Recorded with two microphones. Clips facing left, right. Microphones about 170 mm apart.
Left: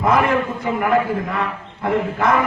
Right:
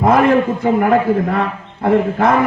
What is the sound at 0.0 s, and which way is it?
A man's voice, 45° right (ahead or behind).